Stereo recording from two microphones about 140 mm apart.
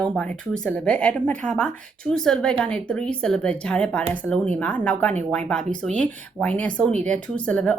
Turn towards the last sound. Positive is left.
turn(degrees=10)  # may be behind; listen again after turning